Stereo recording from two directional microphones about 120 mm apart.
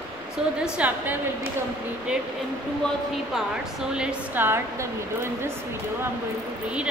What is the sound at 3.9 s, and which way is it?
Speech, 10° right (ahead or behind).